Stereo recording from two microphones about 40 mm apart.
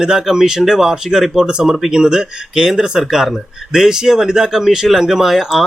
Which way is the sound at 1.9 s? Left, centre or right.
Centre.